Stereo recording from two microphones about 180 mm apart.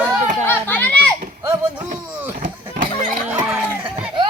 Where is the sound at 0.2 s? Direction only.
40° right (ahead or behind).